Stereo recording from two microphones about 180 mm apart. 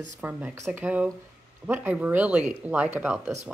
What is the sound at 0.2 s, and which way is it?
Speech, 10° right (ahead or behind).